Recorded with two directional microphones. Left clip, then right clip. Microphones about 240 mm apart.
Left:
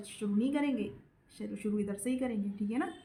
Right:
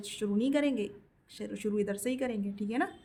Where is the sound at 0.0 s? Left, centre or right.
Right.